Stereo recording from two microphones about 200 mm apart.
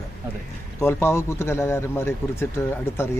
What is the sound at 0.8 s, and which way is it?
A man's voice, 10° left (ahead or behind).